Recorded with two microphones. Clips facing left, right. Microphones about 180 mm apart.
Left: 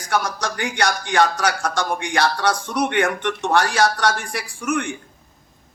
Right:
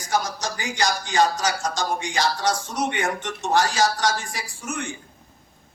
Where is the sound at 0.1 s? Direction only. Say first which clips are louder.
Left 2 dB; 65° left (ahead or behind).